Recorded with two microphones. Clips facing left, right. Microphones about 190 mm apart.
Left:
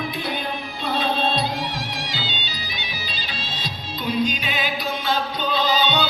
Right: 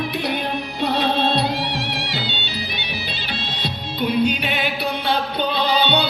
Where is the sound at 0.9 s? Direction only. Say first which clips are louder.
Right 2 dB; 65° right (ahead or behind).